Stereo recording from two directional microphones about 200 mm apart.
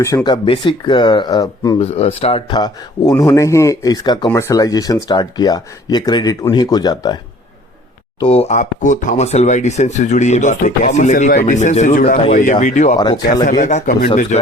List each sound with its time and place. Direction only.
0.3 s speech: 25° left (ahead or behind)
1.8 s speech: 30° left (ahead or behind)
8.2 s speech: 30° left (ahead or behind)
13.0 s speech: 20° left (ahead or behind)
13.6 s speech: 35° left (ahead or behind)